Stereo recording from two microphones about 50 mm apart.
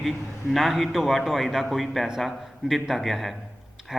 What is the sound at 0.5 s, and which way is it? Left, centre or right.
A man's voice, centre.